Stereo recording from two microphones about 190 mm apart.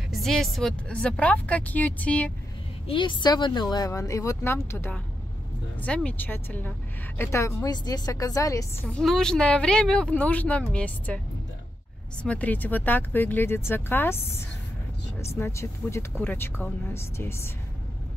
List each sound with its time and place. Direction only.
0.1 s speech: centre (ahead or behind)
2.9 s a woman's voice: 25° left (ahead or behind)
8.8 s speech: 5° left (ahead or behind)
12.2 s speech: 5° left (ahead or behind)